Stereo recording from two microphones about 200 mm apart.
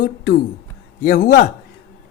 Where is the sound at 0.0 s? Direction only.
50° left (ahead or behind).